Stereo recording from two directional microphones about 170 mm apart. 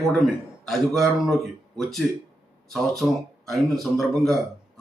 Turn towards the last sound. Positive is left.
turn(degrees=0)  # may be behind; listen again after turning